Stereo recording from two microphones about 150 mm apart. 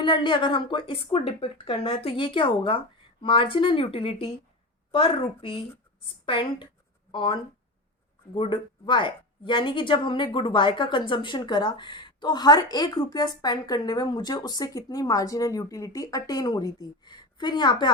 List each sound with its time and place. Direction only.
0.0 s a woman's voice: 30° left (ahead or behind)